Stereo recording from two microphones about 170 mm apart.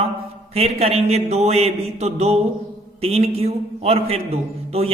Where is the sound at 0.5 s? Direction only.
35° right (ahead or behind).